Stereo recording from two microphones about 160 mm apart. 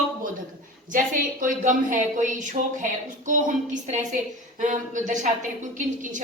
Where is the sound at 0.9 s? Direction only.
60° right (ahead or behind).